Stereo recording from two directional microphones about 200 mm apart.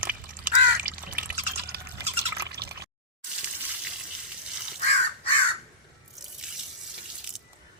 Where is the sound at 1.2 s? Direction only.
50° right (ahead or behind).